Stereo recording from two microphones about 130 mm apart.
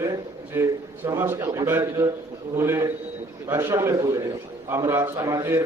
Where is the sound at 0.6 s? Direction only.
20° right (ahead or behind).